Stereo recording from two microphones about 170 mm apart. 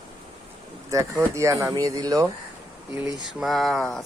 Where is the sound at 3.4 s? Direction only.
Centre (ahead or behind).